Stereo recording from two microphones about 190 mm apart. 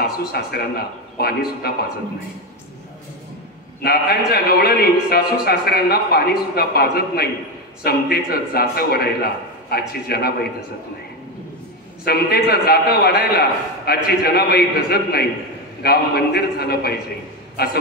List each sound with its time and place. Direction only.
0.0 s a man's voice: 55° left (ahead or behind)
3.8 s a man's voice: 55° left (ahead or behind)
12.0 s a man's voice: 55° left (ahead or behind)